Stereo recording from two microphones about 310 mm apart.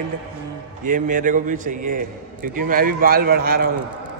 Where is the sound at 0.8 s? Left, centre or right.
Right.